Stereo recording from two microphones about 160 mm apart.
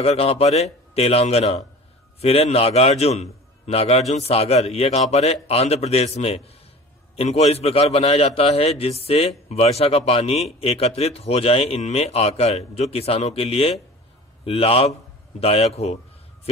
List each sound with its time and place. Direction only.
0.0 s a man's voice: 40° left (ahead or behind)